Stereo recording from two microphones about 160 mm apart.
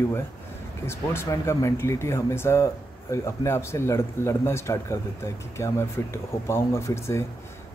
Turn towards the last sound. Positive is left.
turn(degrees=15)  # may be behind; listen again after turning